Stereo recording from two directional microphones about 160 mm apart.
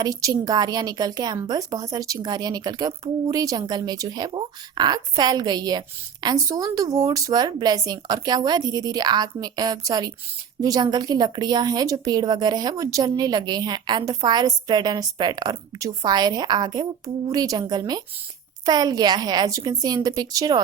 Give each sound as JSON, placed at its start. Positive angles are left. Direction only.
{"t": 0.0, "sound": "a woman's voice", "side_deg": -20}